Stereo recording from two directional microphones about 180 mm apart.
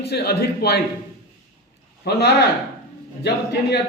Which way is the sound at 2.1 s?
65° left (ahead or behind).